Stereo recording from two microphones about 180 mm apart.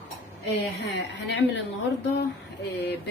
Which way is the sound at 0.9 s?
80° left.